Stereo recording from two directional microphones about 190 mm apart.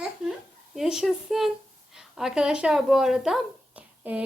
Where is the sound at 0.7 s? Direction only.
Centre (ahead or behind).